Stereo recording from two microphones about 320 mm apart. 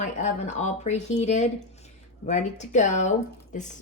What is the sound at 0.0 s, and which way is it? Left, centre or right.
A woman's voice, left.